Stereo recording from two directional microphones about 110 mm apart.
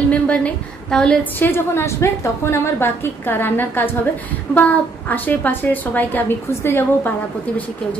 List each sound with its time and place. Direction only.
0.1 s a woman's voice: 10° left (ahead or behind)
1.4 s a woman's voice: 20° left (ahead or behind)